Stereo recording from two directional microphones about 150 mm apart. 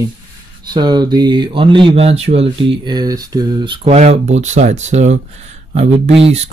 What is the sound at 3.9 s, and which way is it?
Speech, 50° right (ahead or behind).